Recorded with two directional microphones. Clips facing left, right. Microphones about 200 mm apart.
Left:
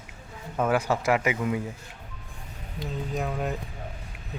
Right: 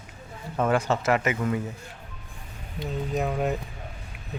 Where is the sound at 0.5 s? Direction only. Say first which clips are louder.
Right 1 dB; 5° left (ahead or behind).